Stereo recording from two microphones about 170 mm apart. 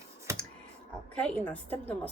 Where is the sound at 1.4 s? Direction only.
10° left (ahead or behind).